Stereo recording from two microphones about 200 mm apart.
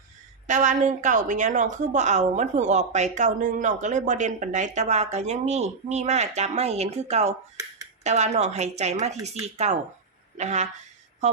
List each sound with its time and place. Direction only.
0.4 s a woman's voice: 40° right (ahead or behind)